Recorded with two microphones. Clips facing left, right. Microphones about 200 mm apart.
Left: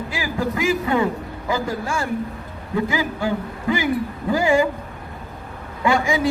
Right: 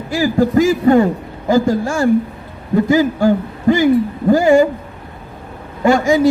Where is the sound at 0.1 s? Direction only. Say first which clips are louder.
Right 13 dB; 45° right (ahead or behind).